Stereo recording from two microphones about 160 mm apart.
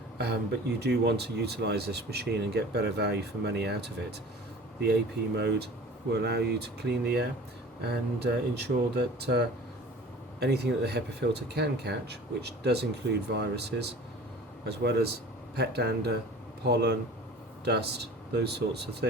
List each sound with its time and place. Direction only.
0.8 s speech: 90° right
5.4 s speech: 90° right
10.4 s speech: 90° right